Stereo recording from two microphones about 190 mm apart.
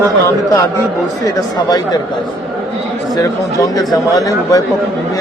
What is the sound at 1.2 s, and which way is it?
Speech, 20° left (ahead or behind).